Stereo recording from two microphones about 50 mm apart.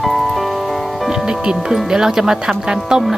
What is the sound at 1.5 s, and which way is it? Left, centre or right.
Speech, centre.